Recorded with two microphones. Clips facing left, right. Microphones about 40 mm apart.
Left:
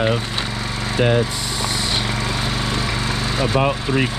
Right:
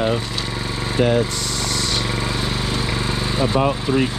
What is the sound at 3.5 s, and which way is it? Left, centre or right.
Speech, centre.